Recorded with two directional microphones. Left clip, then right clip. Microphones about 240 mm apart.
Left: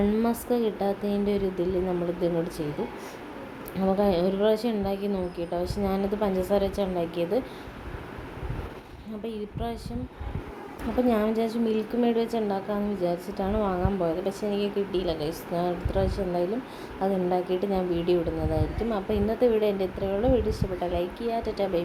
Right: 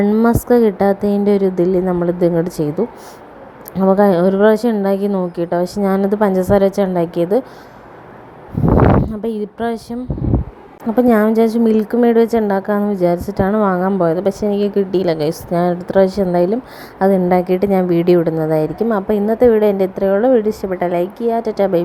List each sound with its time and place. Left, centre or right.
0.0 s a woman's voice: right
3.8 s a woman's voice: right
9.2 s a woman's voice: right
10.9 s a woman's voice: right